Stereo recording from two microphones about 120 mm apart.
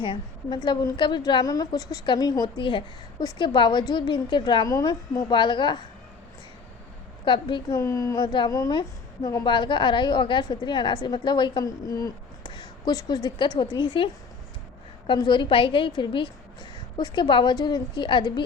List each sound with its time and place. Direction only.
0.0 s a woman's voice: 40° left (ahead or behind)
7.3 s a woman's voice: 40° left (ahead or behind)
7.8 s a woman's voice: 25° left (ahead or behind)